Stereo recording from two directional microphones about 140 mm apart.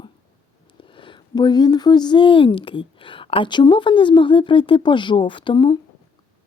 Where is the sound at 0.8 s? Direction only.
35° left (ahead or behind).